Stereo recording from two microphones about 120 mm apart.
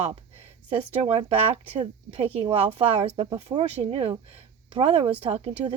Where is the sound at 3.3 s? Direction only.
40° right (ahead or behind).